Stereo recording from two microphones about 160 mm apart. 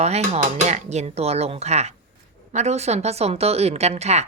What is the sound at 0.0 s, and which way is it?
Speech, 45° right (ahead or behind).